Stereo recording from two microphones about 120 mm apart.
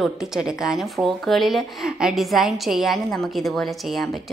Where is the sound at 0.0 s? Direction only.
5° right (ahead or behind).